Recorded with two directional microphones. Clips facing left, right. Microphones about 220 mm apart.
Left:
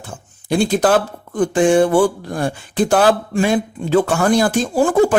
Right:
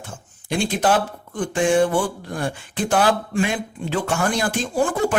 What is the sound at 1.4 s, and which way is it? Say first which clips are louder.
Speech: left 5 dB; 35° left (ahead or behind).